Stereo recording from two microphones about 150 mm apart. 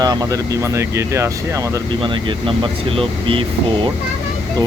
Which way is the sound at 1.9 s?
35° right (ahead or behind).